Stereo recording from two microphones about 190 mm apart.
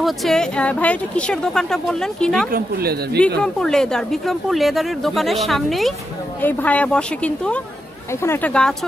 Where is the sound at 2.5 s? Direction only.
55° right (ahead or behind).